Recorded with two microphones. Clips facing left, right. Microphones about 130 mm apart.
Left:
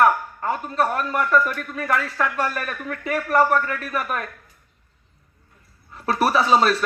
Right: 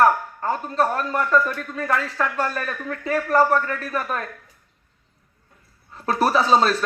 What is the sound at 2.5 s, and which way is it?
Speech, 30° right (ahead or behind).